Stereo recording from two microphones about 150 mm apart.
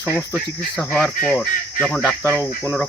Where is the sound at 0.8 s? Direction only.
5° left (ahead or behind).